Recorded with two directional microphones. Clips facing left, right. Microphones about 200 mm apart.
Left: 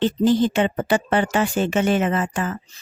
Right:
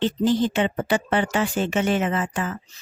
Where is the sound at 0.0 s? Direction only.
45° left (ahead or behind).